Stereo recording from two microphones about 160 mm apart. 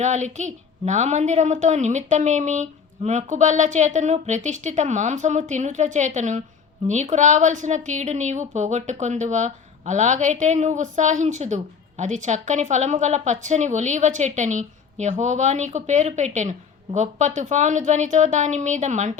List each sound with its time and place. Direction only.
0.0 s a woman's voice: 45° right (ahead or behind)